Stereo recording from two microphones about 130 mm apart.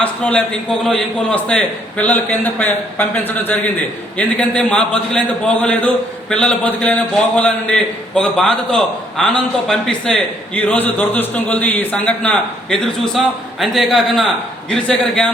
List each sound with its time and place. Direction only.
0.0 s a man's voice: 10° left (ahead or behind)